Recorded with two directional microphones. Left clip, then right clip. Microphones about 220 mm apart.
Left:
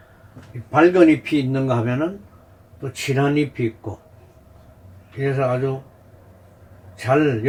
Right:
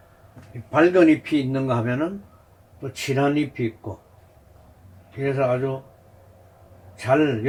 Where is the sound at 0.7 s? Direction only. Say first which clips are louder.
Left 2 dB; 25° right (ahead or behind).